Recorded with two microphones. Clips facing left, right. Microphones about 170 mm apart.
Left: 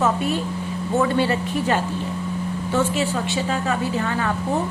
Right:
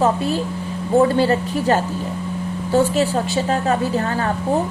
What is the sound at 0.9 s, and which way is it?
A woman's voice, 35° right (ahead or behind).